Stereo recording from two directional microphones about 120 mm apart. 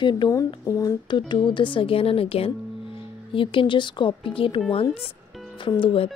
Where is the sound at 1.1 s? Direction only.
40° left (ahead or behind).